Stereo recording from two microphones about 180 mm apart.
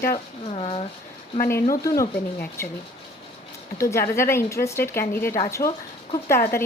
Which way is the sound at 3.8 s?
15° left (ahead or behind).